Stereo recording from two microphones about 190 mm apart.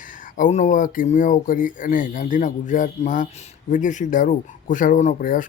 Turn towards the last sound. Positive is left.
turn(degrees=45)  # may be behind; listen again after turning